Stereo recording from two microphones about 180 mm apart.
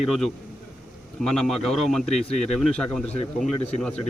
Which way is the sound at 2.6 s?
Centre (ahead or behind).